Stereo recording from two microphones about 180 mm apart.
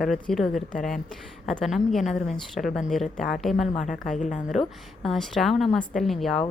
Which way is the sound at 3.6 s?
40° left (ahead or behind).